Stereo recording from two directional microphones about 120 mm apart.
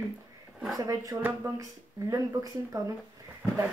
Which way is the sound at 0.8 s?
25° right (ahead or behind).